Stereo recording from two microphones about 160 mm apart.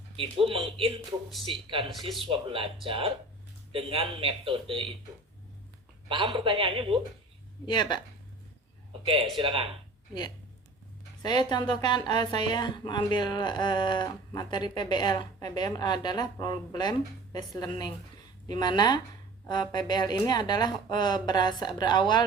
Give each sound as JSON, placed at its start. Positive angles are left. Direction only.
{"t": 1.3, "sound": "speech", "side_deg": 0}
{"t": 1.6, "sound": "speech", "side_deg": -30}
{"t": 1.9, "sound": "speech", "side_deg": 0}
{"t": 2.2, "sound": "speech", "side_deg": -35}
{"t": 6.1, "sound": "speech", "side_deg": -30}
{"t": 7.7, "sound": "a woman's voice", "side_deg": 30}
{"t": 8.9, "sound": "a sound", "side_deg": -35}
{"t": 9.3, "sound": "speech", "side_deg": -30}
{"t": 11.2, "sound": "a woman's voice", "side_deg": 25}